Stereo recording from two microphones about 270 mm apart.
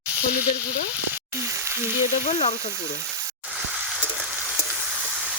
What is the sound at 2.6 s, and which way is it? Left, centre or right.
Frying, centre.